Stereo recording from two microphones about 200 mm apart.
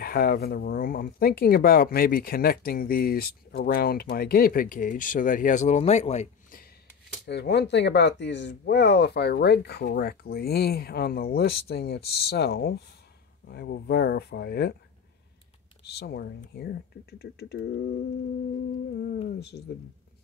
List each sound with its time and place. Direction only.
0.0 s speech: 50° left (ahead or behind)
7.2 s speech: 55° left (ahead or behind)
15.8 s speech: 55° left (ahead or behind)
18.9 s speech: 55° left (ahead or behind)